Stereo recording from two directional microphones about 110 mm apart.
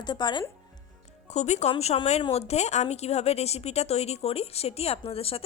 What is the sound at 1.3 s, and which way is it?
Speech, 90° left.